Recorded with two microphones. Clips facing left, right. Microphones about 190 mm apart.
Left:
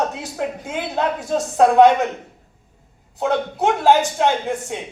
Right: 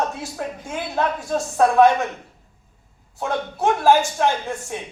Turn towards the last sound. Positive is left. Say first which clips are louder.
# left 2 dB
turn(degrees=20)  # may be behind; listen again after turning